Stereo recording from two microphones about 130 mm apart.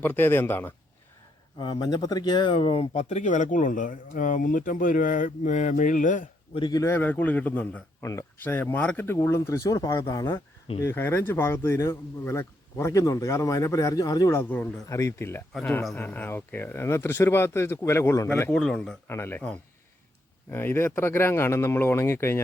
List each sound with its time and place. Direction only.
0.0 s speech: 15° left (ahead or behind)
1.5 s speech: 35° left (ahead or behind); by 6.2 s 85° left
6.5 s speech: 35° left (ahead or behind)
6.8 s a man's voice: 15° left (ahead or behind)
18.5 s a man's voice: 5° left (ahead or behind)
19.0 s a man's voice: 20° left (ahead or behind)
20.5 s speech: 15° left (ahead or behind)